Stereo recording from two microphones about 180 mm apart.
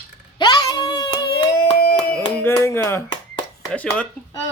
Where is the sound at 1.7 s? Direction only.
60° left (ahead or behind).